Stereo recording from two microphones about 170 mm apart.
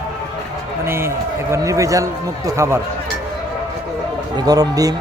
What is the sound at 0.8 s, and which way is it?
Speech, 15° right (ahead or behind).